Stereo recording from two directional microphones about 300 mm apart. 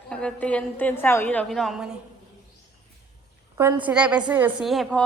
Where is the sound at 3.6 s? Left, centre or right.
Centre.